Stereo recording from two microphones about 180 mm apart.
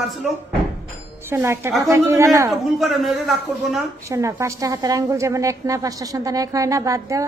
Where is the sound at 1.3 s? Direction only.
15° right (ahead or behind).